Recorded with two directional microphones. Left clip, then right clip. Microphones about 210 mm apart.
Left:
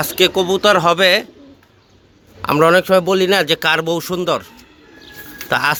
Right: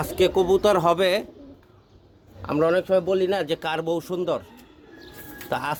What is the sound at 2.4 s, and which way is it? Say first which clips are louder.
A man's voice: left 9 dB; 20° left (ahead or behind).